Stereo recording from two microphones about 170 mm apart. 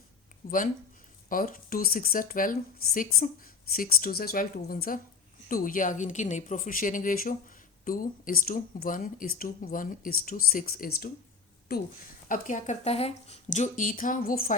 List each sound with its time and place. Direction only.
0.4 s a woman's voice: 60° left (ahead or behind)
12.3 s speech: 50° left (ahead or behind)